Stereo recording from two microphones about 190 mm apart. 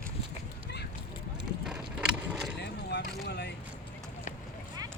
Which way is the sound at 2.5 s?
65° left (ahead or behind).